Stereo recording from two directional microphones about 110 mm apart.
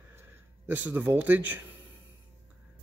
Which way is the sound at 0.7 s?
15° right (ahead or behind).